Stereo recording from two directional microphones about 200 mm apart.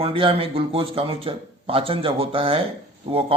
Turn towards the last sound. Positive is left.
turn(degrees=-30)  # may be behind; listen again after turning